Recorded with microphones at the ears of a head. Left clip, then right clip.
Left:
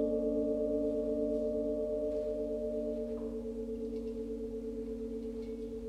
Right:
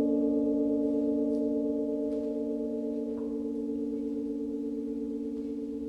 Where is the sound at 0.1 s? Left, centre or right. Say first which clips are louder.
Right 4 dB; right.